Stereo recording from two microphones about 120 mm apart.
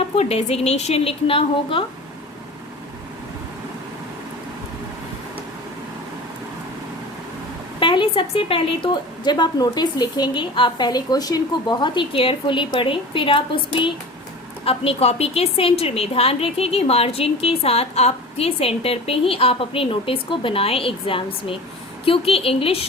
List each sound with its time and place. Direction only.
0.2 s a woman's voice: 60° left (ahead or behind)
7.8 s a woman's voice: 45° left (ahead or behind)